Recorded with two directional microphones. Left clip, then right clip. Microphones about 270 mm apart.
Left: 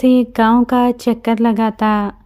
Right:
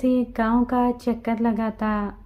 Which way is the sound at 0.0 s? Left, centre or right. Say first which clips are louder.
Left 9 dB; left.